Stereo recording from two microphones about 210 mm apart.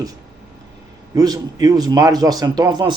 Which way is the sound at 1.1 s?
20° right (ahead or behind).